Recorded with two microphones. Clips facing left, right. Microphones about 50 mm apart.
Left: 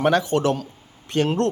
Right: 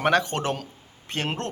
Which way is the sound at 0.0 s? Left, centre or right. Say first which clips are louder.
Left 3 dB; right.